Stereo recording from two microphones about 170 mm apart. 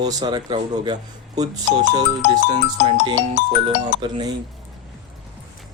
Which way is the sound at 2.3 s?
25° right (ahead or behind).